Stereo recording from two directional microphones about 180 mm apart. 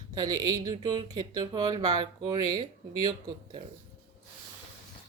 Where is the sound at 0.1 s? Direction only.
20° right (ahead or behind).